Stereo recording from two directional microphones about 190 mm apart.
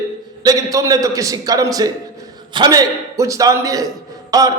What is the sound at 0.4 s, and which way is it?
A man's voice, 20° right (ahead or behind).